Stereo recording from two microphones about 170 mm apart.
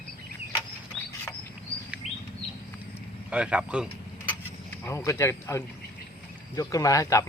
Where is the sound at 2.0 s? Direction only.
40° left (ahead or behind).